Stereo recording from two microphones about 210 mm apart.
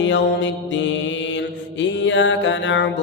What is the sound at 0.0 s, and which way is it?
Mantra, 60° left (ahead or behind).